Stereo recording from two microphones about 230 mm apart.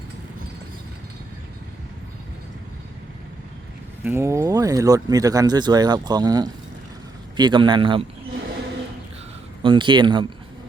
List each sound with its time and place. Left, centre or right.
4.0 s a man's voice: centre
9.6 s a man's voice: right